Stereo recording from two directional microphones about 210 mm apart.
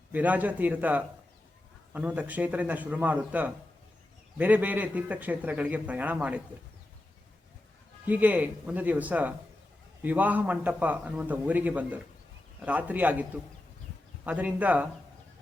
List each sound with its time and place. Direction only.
0.1 s a man's voice: 5° right (ahead or behind)
8.0 s a man's voice: 10° right (ahead or behind)
14.3 s a man's voice: 5° right (ahead or behind)